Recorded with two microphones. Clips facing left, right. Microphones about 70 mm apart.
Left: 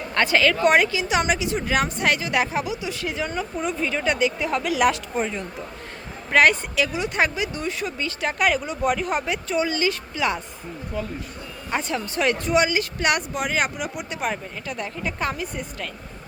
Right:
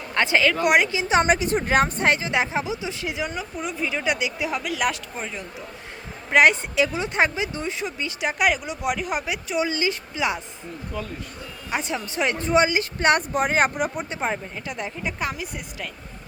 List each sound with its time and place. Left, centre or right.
0.1 s speech: centre
0.9 s speech: right; by 4.7 s centre
4.7 s speech: centre
6.3 s speech: centre
11.7 s speech: centre